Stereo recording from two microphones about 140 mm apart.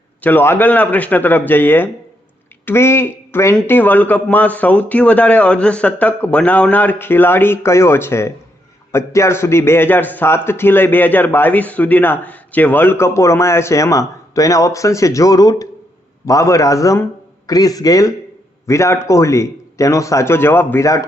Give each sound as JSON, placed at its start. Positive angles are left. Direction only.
{"t": 0.2, "sound": "a man's voice", "side_deg": 15}